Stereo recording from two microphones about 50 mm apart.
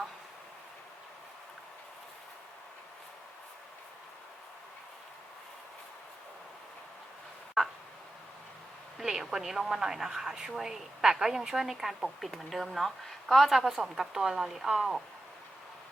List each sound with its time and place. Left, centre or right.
9.0 s a woman's voice: centre